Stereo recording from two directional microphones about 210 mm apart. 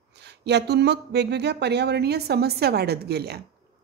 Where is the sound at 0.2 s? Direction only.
55° right (ahead or behind).